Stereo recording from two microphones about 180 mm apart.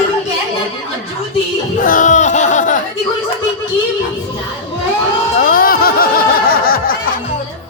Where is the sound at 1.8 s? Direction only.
45° left (ahead or behind).